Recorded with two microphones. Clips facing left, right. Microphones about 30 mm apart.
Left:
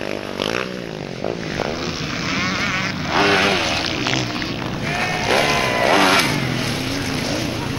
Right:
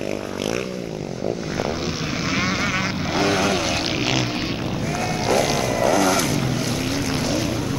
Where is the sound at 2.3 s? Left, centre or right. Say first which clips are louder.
Left 1 dB; centre.